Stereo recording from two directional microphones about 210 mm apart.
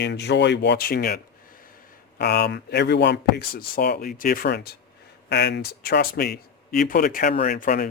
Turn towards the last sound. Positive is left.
turn(degrees=40)  # may be behind; listen again after turning